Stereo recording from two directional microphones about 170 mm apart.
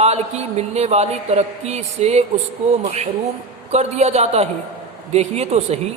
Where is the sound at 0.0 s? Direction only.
40° right (ahead or behind).